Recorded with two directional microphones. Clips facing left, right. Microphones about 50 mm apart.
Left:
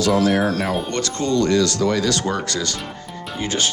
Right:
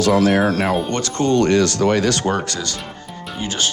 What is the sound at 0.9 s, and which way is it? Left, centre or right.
Speech, right.